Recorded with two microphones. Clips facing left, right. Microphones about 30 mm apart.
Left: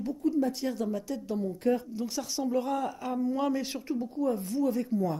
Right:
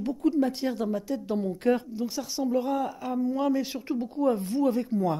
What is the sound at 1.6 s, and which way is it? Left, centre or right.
Speech, right.